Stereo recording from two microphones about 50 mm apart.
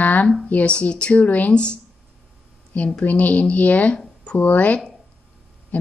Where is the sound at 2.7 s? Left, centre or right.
Left.